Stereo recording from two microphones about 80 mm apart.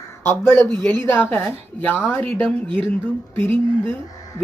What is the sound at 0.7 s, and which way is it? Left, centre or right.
A woman's voice, centre.